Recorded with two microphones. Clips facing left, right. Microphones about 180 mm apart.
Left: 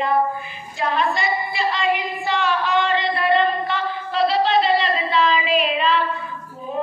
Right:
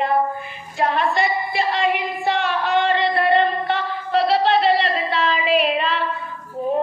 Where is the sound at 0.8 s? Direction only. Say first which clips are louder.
Right 2 dB; 55° right (ahead or behind).